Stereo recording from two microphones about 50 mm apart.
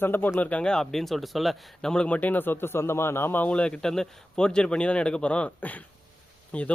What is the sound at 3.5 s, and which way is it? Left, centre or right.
Speech, left.